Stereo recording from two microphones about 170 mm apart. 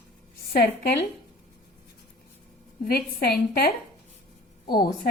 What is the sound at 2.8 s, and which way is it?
Speech, 60° left (ahead or behind).